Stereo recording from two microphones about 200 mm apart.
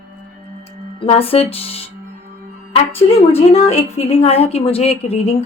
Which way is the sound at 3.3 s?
30° left (ahead or behind).